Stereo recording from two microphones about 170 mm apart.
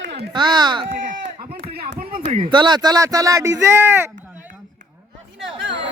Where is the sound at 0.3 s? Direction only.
25° right (ahead or behind).